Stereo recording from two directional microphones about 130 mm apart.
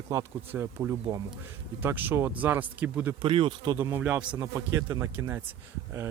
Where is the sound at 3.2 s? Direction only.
40° right (ahead or behind).